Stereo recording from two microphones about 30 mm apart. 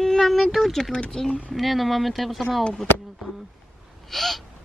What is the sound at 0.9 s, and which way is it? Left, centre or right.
Speech, left.